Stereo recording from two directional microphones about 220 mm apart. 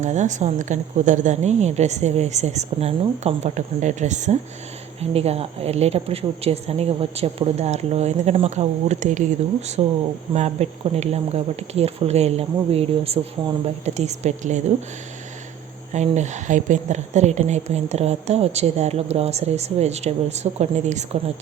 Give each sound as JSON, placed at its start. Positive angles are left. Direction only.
{"t": 0.0, "sound": "a woman's voice", "side_deg": -35}
{"t": 15.9, "sound": "a woman's voice", "side_deg": -30}